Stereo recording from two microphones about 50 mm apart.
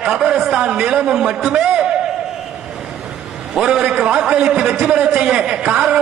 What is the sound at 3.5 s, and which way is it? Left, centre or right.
A man's voice, centre.